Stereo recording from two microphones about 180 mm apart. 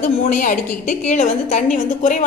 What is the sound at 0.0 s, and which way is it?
A woman's voice, 45° left (ahead or behind).